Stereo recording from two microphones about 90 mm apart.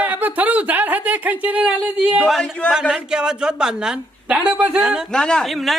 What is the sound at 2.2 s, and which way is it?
Speech, 5° left (ahead or behind).